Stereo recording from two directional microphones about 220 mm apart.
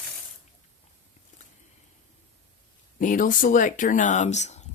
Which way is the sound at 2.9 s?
35° left (ahead or behind).